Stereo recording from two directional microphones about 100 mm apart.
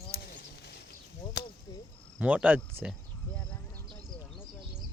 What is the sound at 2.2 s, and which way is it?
Speech, 15° right (ahead or behind).